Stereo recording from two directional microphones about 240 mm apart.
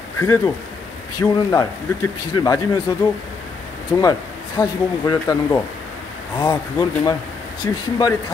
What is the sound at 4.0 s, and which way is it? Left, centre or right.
Speech, centre.